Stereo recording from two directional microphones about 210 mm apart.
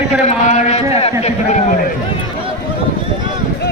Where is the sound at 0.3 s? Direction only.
35° left (ahead or behind).